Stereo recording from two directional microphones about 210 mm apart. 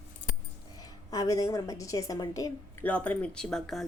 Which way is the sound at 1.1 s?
15° left (ahead or behind).